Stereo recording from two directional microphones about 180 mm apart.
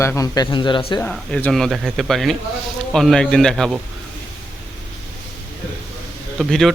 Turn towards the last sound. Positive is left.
turn(degrees=0)  # may be behind; listen again after turning